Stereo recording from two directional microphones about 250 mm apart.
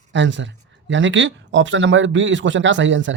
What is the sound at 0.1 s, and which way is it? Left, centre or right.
Speech, right.